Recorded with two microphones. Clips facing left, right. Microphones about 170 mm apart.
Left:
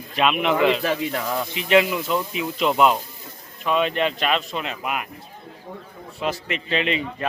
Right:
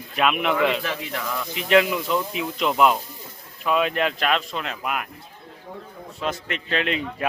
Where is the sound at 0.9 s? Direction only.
35° left (ahead or behind).